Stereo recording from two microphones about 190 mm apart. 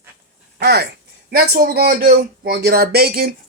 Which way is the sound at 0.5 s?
60° right (ahead or behind).